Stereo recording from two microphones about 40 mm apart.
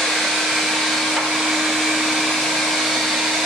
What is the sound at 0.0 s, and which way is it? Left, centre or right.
Vacuum cleaner, centre.